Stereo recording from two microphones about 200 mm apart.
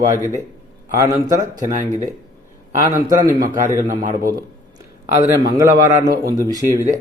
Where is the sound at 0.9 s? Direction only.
15° right (ahead or behind).